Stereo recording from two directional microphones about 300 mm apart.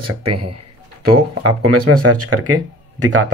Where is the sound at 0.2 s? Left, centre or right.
Right.